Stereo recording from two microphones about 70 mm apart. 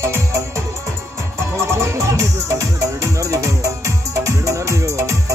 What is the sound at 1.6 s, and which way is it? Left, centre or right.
Music, right.